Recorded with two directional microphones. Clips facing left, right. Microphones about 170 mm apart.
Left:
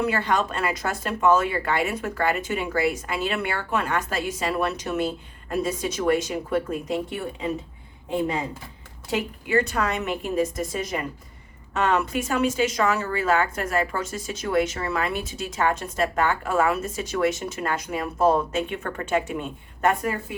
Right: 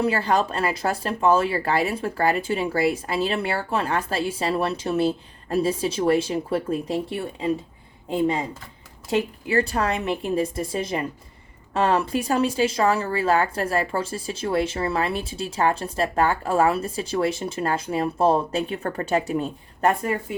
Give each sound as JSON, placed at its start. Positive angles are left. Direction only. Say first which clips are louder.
{"t": 0.0, "sound": "speech", "louder": "right 2 dB", "side_deg": -30}
{"t": 9.1, "sound": "speech", "louder": "right 1 dB", "side_deg": -35}